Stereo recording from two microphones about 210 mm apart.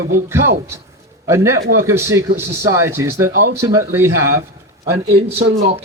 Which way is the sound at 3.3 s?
45° right (ahead or behind).